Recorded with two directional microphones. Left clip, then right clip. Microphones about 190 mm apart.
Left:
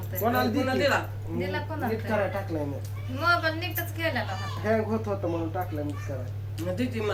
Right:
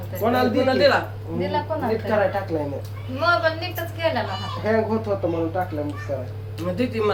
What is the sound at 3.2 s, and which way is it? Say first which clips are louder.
A woman's voice: right 5 dB; 20° right (ahead or behind).